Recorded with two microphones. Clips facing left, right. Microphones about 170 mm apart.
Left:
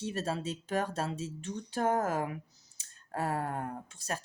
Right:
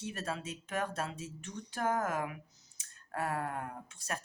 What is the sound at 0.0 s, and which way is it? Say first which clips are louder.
Speech: left 5 dB; 30° left (ahead or behind).